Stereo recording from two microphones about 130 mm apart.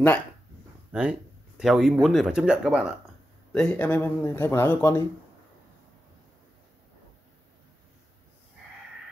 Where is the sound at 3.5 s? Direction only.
5° left (ahead or behind).